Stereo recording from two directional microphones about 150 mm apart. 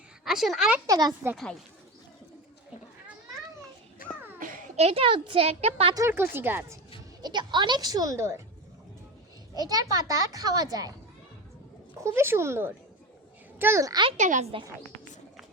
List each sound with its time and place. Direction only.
0.3 s speech: centre (ahead or behind)
0.9 s a child's voice: 25° right (ahead or behind)
4.8 s speech: 40° right (ahead or behind)
5.9 s speech: 20° right (ahead or behind)
7.2 s a child's voice: 30° right (ahead or behind)
9.6 s a child's voice: 25° right (ahead or behind)
11.9 s a child's voice: 20° right (ahead or behind)
14.2 s speech: 55° right (ahead or behind)